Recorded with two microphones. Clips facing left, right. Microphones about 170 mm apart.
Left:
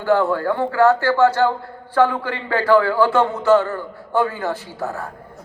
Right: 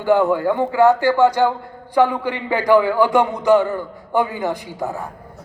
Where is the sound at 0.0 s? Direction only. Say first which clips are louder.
Right 2 dB; 15° right (ahead or behind).